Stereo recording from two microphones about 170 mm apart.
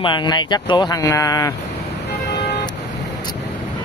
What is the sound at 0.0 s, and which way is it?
Speech, 25° left (ahead or behind).